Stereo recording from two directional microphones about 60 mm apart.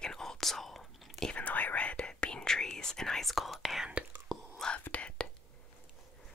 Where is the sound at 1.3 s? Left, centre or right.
Left; by 3.9 s centre.